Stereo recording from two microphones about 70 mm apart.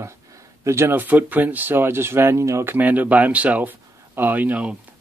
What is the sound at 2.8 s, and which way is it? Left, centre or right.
Speech, right.